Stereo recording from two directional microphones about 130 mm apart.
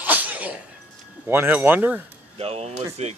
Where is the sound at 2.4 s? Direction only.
55° right (ahead or behind).